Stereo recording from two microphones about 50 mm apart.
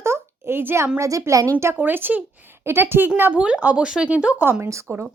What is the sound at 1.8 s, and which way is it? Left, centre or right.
Speech, right.